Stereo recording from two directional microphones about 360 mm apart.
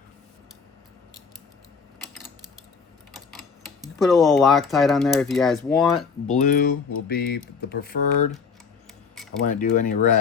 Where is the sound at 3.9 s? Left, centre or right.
Centre.